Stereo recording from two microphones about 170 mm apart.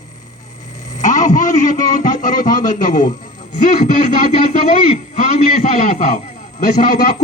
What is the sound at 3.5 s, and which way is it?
Music, 50° left (ahead or behind).